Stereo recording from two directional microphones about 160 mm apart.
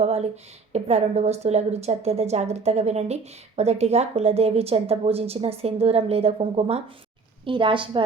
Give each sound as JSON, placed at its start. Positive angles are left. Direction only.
{"t": 0.0, "sound": "a woman's voice", "side_deg": -40}